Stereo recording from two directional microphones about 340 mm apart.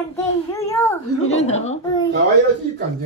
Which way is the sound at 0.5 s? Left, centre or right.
Centre.